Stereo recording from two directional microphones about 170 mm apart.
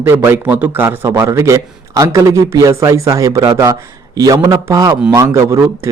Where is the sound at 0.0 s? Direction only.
15° right (ahead or behind).